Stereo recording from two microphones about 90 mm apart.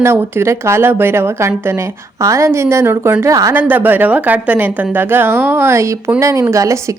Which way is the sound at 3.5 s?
20° right (ahead or behind).